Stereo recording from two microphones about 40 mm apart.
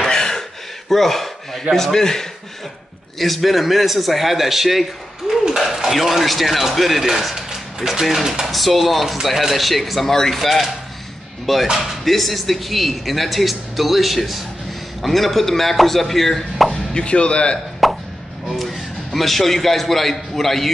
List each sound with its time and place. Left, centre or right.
0.0 s a sound: centre
0.4 s speech: centre
3.2 s speech: centre
5.9 s speech: centre
8.5 s speech: centre
16.9 s chop: left
17.8 s plop: centre
18.5 s speech: centre